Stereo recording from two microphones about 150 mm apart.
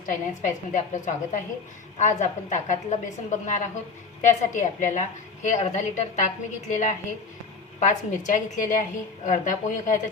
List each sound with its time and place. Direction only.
0.0 s a woman's voice: 60° left (ahead or behind)